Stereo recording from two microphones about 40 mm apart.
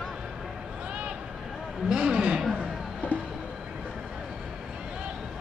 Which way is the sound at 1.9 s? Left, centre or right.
Centre.